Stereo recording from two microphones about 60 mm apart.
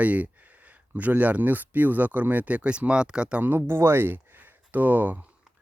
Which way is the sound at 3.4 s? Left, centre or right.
Right.